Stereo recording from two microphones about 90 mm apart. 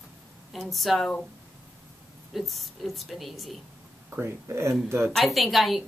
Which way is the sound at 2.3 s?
Centre (ahead or behind).